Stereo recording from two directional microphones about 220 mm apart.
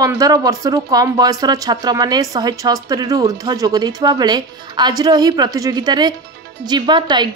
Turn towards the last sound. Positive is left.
turn(degrees=-20)  # may be behind; listen again after turning